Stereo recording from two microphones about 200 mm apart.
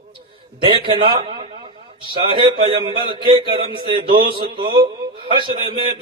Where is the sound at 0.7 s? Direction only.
25° right (ahead or behind).